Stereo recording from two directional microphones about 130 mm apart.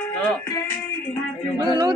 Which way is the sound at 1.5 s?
35° right (ahead or behind).